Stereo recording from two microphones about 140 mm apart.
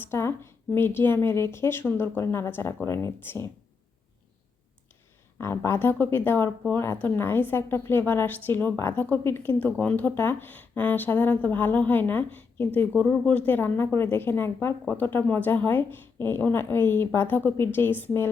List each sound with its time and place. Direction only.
0.0 s speech: 15° left (ahead or behind)
5.4 s speech: 20° left (ahead or behind)